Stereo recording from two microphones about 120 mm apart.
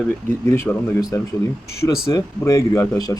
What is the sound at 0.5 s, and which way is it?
Speech, 25° left (ahead or behind).